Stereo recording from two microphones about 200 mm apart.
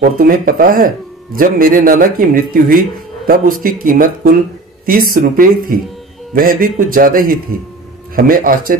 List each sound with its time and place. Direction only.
0.0 s speech: 45° right (ahead or behind)